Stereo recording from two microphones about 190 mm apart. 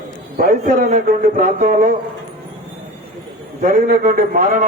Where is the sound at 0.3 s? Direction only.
45° right (ahead or behind).